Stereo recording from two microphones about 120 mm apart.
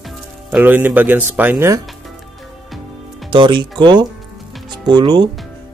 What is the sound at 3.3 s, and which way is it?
Speech, 40° right (ahead or behind).